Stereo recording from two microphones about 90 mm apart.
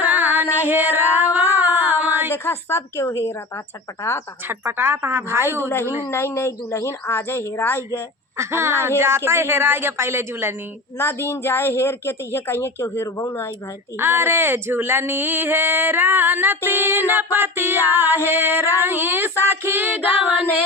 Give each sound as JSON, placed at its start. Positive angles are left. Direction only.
{"t": 0.0, "sound": "music", "side_deg": -20}
{"t": 0.7, "sound": "female singing", "side_deg": -20}
{"t": 2.3, "sound": "a woman's voice", "side_deg": 25}
{"t": 4.4, "sound": "speech", "side_deg": -25}
{"t": 5.6, "sound": "a woman's voice", "side_deg": 25}
{"t": 8.4, "sound": "speech", "side_deg": -30}
{"t": 10.9, "sound": "a woman's voice", "side_deg": 25}
{"t": 14.0, "sound": "speech", "side_deg": -25}